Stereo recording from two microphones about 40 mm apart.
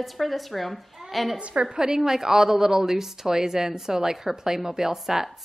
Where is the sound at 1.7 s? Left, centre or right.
Centre.